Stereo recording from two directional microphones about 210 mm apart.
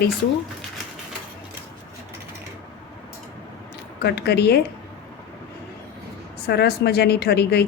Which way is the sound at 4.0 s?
50° left (ahead or behind).